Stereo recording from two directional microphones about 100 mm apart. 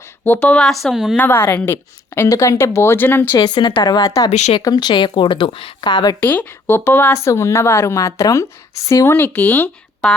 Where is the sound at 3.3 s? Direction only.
45° left (ahead or behind).